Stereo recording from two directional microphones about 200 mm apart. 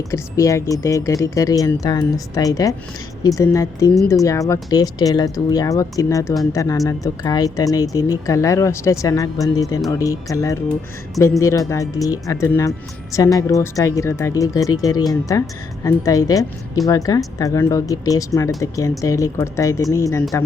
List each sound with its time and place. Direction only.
0.1 s speech: 15° left (ahead or behind)